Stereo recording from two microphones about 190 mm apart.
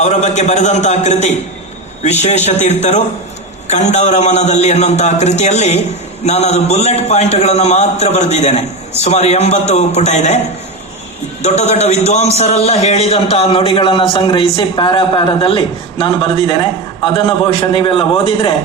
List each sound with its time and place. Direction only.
0.0 s a man's voice: 40° left (ahead or behind)
11.4 s a man's voice: 35° left (ahead or behind)